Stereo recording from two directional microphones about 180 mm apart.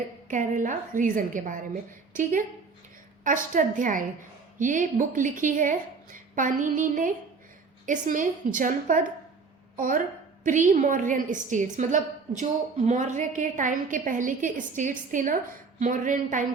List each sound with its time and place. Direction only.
0.3 s a woman's voice: 45° right (ahead or behind)
3.2 s a woman's voice: 45° right (ahead or behind)